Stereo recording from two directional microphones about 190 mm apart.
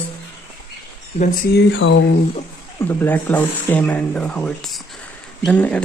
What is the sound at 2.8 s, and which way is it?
Speech, 10° left (ahead or behind).